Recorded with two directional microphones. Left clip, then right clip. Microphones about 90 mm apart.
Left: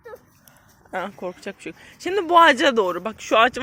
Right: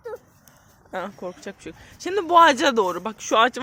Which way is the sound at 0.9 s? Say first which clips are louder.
Left 2 dB; 20° left (ahead or behind).